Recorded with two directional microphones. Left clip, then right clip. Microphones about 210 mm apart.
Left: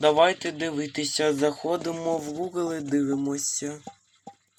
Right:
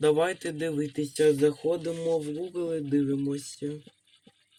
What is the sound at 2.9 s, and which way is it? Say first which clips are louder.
Speech: left 3 dB; 5° left (ahead or behind).